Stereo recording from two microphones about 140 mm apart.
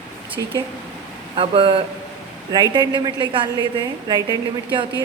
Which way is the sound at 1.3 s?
40° right (ahead or behind).